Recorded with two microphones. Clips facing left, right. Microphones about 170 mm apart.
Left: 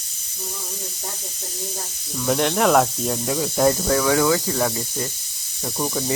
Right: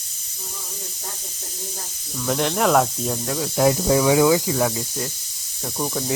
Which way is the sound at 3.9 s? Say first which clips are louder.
Right 2 dB; 15° right (ahead or behind).